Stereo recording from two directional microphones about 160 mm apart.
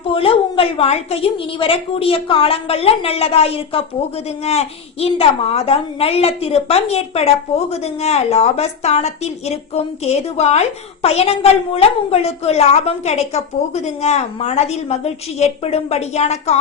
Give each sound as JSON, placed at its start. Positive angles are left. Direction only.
{"t": 0.1, "sound": "a woman's voice", "side_deg": 35}